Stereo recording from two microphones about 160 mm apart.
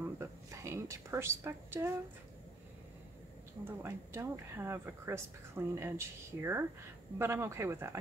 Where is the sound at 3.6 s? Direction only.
15° right (ahead or behind).